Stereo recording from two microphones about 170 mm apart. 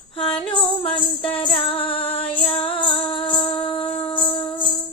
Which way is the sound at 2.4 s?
30° left (ahead or behind).